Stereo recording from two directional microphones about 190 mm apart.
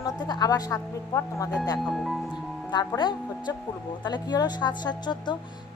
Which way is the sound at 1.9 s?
Centre (ahead or behind).